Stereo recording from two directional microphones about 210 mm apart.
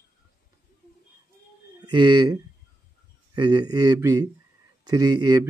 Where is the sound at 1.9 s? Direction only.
20° right (ahead or behind).